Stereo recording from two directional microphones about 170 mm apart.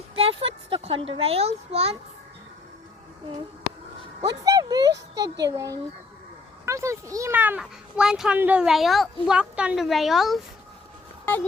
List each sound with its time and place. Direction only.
0.2 s a child's voice: 35° right (ahead or behind)
4.4 s a child's voice: 20° right (ahead or behind); by 10.4 s centre (ahead or behind)